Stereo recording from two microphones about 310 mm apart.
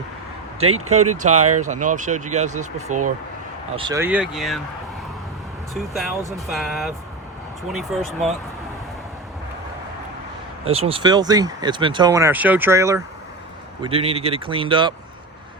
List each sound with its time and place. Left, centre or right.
0.9 s speech: right
3.8 s speech: centre
5.7 s speech: centre
10.7 s speech: centre